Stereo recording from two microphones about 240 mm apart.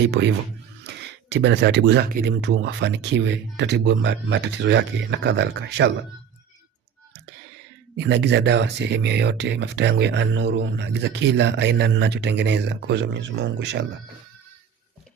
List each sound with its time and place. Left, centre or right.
0.2 s speech: right
7.9 s speech: right